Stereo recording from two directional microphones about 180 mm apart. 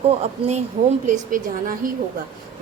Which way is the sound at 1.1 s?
50° right (ahead or behind).